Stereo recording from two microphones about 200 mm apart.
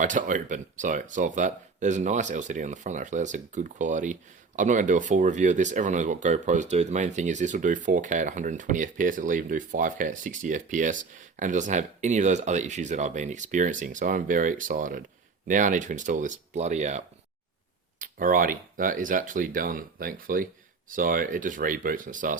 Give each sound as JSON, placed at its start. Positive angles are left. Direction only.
{"t": 0.0, "sound": "speech", "side_deg": -40}
{"t": 18.0, "sound": "speech", "side_deg": -45}